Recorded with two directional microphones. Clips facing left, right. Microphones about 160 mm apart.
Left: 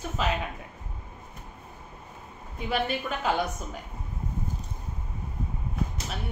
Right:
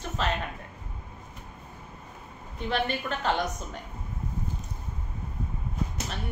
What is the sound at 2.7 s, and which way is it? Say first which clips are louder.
A woman's voice: left 1 dB; 5° left (ahead or behind).